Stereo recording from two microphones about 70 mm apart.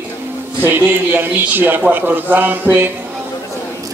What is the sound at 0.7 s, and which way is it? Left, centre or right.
A man's voice, right.